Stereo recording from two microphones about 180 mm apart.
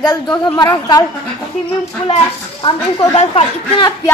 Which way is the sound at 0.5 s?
20° left (ahead or behind).